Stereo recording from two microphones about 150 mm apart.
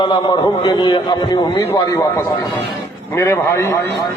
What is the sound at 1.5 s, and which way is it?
A man's voice, 15° left (ahead or behind).